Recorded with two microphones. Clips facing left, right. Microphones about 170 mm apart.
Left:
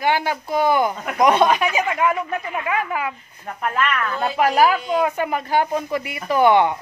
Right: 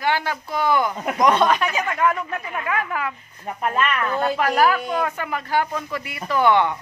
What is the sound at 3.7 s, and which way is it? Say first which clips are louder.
Speech: even; 20° right (ahead or behind).